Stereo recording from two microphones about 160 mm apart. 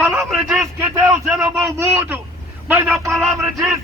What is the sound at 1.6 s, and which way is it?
A man's voice, 15° right (ahead or behind).